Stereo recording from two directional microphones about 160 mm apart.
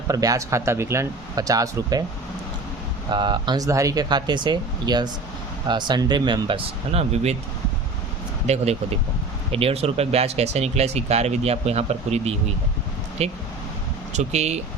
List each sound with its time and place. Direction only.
0.1 s speech: 20° right (ahead or behind)
3.1 s speech: 30° right (ahead or behind)
8.5 s speech: 45° right (ahead or behind)